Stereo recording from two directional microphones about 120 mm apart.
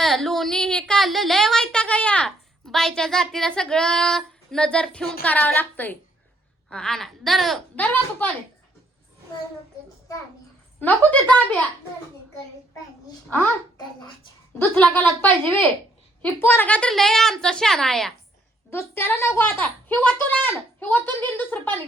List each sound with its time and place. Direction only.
0.0 s a woman's voice: centre (ahead or behind)
7.8 s speech: 10° left (ahead or behind)
10.8 s speech: 10° left (ahead or behind)
14.6 s speech: 15° left (ahead or behind)
18.7 s speech: 20° left (ahead or behind)